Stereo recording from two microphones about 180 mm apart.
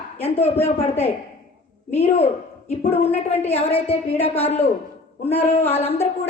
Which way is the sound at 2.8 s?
35° left (ahead or behind).